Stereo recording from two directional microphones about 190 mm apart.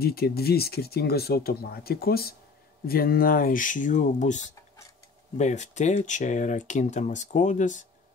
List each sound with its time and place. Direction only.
0.0 s speech: 55° left (ahead or behind)
5.4 s speech: 40° left (ahead or behind)